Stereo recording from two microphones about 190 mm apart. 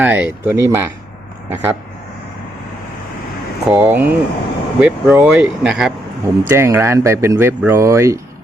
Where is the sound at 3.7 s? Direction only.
10° right (ahead or behind).